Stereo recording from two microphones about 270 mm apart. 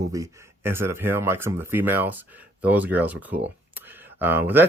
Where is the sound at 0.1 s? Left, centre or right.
Centre.